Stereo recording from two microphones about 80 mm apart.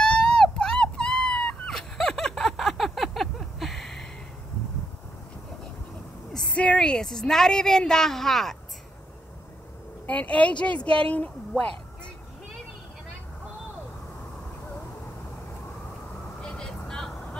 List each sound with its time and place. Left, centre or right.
0.0 s dog: centre
6.3 s a woman's voice: centre
10.0 s a woman's voice: centre
16.3 s vehicle: centre